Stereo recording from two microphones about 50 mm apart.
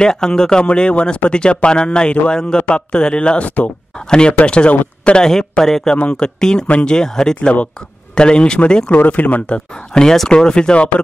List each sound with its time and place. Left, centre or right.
0.0 s speech: centre
5.2 s speech: centre
5.9 s speech: left
7.0 s speech: centre
7.3 s speech: left
8.9 s speech: left
9.5 s speech: centre